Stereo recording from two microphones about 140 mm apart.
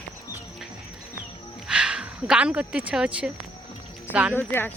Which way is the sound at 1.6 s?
5° right (ahead or behind).